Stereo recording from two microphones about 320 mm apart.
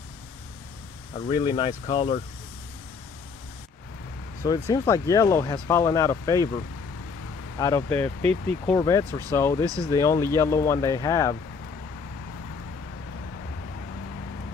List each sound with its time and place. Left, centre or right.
1.1 s speech: centre
4.4 s speech: centre
7.5 s speech: centre